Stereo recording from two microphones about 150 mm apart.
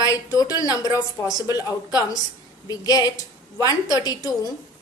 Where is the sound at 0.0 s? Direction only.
25° left (ahead or behind).